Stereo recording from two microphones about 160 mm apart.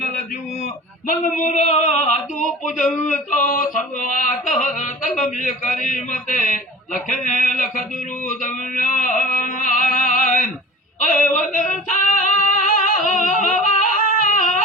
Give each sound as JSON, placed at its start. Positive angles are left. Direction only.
{"t": 0.6, "sound": "music", "side_deg": 50}
{"t": 3.1, "sound": "a sound", "side_deg": 50}
{"t": 4.6, "sound": "music", "side_deg": 50}